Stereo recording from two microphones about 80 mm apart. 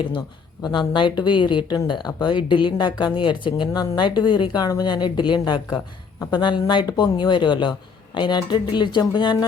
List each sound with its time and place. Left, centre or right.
0.6 s speech: left
3.7 s speech: left
6.8 s speech: left
8.4 s speech: left